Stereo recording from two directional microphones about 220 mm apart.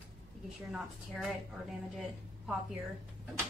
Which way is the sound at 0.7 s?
Centre (ahead or behind).